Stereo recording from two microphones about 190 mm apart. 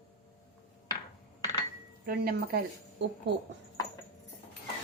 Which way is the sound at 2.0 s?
55° right (ahead or behind).